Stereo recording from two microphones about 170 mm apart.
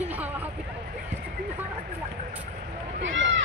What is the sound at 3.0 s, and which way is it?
Speech, 90° right.